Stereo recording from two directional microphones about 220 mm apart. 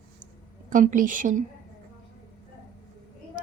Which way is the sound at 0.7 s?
35° right (ahead or behind).